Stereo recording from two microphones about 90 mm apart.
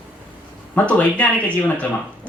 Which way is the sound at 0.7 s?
15° left (ahead or behind).